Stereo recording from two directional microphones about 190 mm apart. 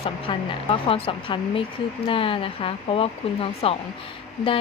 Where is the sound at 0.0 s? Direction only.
30° left (ahead or behind).